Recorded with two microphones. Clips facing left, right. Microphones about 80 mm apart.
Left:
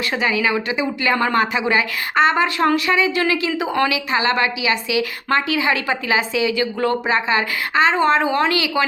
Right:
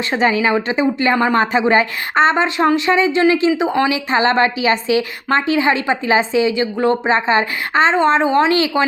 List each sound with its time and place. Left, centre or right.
0.1 s a woman's voice: right
1.1 s a woman's voice: right